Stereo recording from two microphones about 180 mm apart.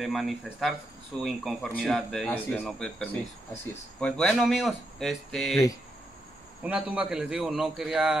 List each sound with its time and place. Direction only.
0.0 s speech: centre (ahead or behind)
6.6 s speech: 5° right (ahead or behind)